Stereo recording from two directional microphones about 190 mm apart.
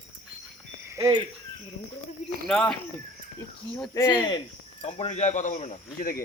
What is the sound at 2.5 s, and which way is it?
Speech, 5° left (ahead or behind).